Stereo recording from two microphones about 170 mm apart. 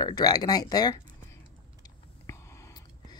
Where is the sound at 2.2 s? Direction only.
20° left (ahead or behind).